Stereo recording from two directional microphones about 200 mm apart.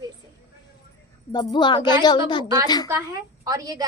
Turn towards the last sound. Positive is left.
turn(degrees=-20)  # may be behind; listen again after turning